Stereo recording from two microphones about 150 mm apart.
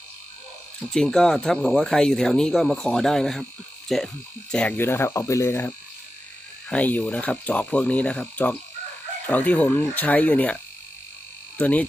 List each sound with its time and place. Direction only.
0.9 s speech: 5° left (ahead or behind)